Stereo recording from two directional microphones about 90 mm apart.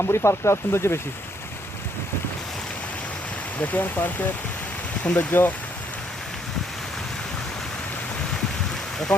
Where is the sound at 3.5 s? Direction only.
20° left (ahead or behind).